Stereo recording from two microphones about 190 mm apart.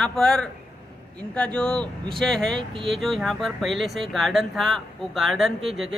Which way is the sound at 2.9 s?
Centre (ahead or behind).